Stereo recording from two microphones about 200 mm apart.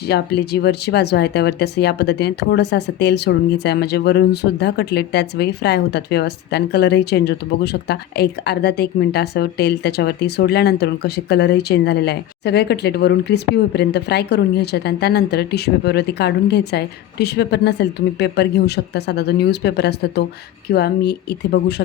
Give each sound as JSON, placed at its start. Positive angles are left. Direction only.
{"t": 0.1, "sound": "speech", "side_deg": 55}